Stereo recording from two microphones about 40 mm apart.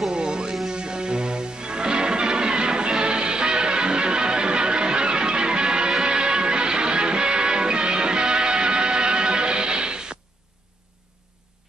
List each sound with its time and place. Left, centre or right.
0.1 s music: right